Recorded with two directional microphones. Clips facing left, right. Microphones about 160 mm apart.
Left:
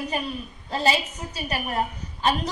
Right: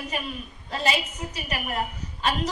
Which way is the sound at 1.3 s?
35° left (ahead or behind).